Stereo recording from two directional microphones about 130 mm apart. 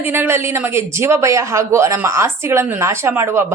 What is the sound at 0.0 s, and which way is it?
A woman's voice, 15° right (ahead or behind).